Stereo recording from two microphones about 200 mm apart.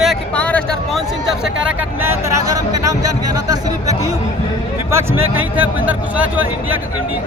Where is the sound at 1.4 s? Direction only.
5° right (ahead or behind).